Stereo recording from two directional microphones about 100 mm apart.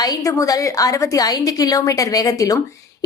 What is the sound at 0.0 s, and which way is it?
A woman's voice, 35° left (ahead or behind).